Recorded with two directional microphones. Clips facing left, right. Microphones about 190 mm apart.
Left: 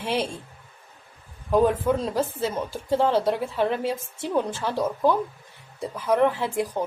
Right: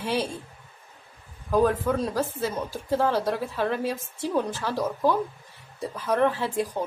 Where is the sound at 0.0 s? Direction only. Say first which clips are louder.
Left 1 dB; 20° left (ahead or behind).